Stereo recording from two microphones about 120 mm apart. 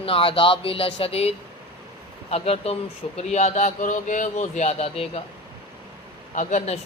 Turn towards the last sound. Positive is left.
turn(degrees=90)